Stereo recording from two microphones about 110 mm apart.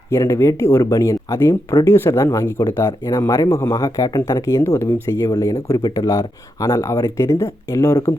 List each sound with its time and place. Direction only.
0.1 s speech: 25° left (ahead or behind)